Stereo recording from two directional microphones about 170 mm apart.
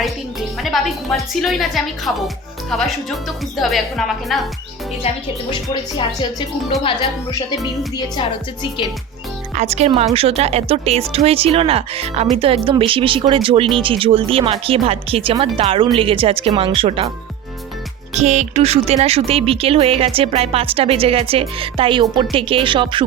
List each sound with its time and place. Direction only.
0.6 s a woman's voice: centre (ahead or behind)
5.0 s speech: 35° left (ahead or behind)
7.5 s speech: 20° left (ahead or behind)
9.6 s speech: 40° right (ahead or behind)
18.1 s speech: 40° right (ahead or behind)